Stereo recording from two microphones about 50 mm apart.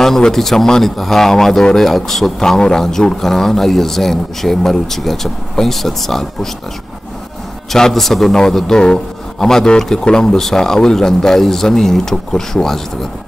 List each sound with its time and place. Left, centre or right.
0.2 s speech: centre
7.7 s a man's voice: centre